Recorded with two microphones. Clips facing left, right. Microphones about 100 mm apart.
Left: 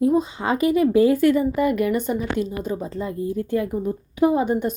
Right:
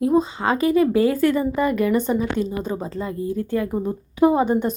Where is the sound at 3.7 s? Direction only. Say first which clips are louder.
Right 1 dB; 35° right (ahead or behind).